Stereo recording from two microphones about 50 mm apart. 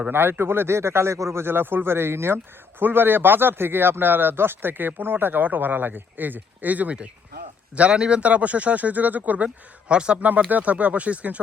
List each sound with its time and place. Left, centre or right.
0.1 s a man's voice: right
1.4 s speech: right
7.8 s speech: right
9.9 s speech: centre
10.2 s speech: right